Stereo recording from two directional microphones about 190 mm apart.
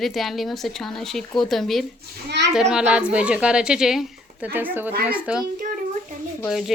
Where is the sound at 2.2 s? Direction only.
65° right (ahead or behind).